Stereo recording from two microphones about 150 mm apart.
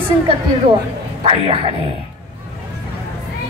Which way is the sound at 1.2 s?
40° right (ahead or behind).